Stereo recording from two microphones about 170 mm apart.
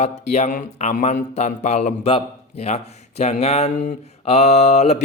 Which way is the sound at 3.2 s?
40° left (ahead or behind).